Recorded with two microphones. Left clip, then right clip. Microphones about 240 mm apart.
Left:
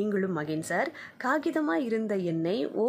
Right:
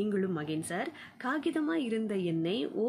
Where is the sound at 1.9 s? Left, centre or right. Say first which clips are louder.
Left 4 dB; centre.